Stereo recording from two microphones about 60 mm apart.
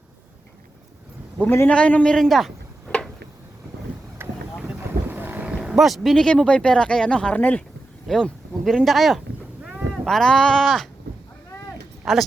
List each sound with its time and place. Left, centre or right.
1.6 s a man's voice: left
2.1 s speech: centre
4.2 s boat: right
5.0 s vehicle: right
5.6 s speech: centre
6.1 s speech: centre
8.0 s speech: centre
9.6 s boat: centre
10.1 s speech: centre
12.0 s speech: centre